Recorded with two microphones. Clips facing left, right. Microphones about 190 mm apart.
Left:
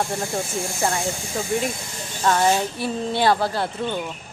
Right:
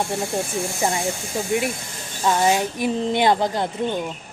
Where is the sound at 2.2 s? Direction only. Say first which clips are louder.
Even; 15° right (ahead or behind).